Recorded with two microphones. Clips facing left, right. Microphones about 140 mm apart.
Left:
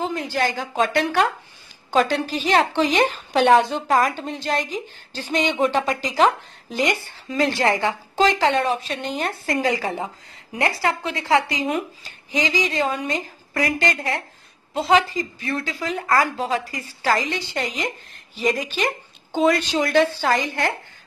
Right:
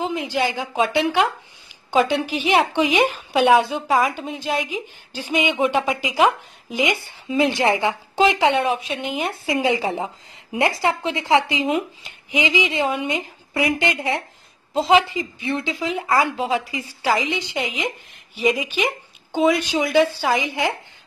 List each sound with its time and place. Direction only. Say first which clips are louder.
0.0 s a woman's voice: right 1 dB; 15° right (ahead or behind)
2.2 s a woman's voice: right 1 dB; 10° right (ahead or behind)